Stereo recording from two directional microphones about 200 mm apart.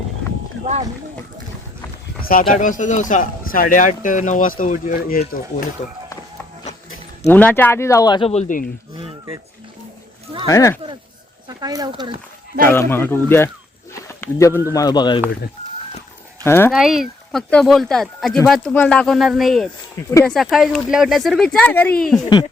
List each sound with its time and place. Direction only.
2.5 s speech: 40° left (ahead or behind)
7.3 s speech: 10° left (ahead or behind); by 8.7 s 40° left (ahead or behind)
10.4 s speech: 15° left (ahead or behind)
11.4 s speech: 20° right (ahead or behind)
12.6 s speech: 10° left (ahead or behind)
16.4 s speech: 10° left (ahead or behind)
16.7 s speech: centre (ahead or behind)